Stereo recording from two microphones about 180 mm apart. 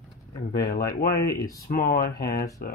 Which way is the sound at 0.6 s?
60° left (ahead or behind).